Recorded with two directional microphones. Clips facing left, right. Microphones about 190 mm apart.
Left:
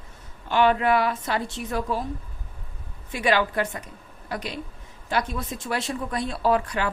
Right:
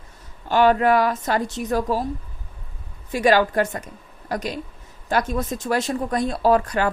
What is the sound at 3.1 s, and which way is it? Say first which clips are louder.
A woman's voice: right 5 dB; 40° right (ahead or behind).